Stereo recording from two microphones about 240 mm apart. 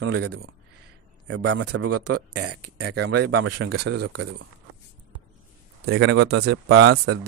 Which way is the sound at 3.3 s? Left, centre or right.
Right.